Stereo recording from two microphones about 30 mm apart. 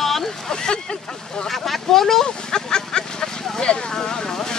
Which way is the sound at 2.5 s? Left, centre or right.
Left.